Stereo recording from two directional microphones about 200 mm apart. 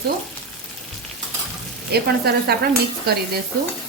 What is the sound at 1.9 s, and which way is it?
Speech, 50° right (ahead or behind).